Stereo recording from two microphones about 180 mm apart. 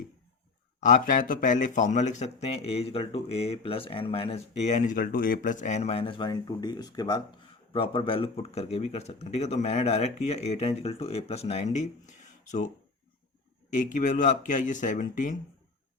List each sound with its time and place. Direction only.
0.8 s a man's voice: 45° left (ahead or behind)
13.7 s speech: 45° left (ahead or behind)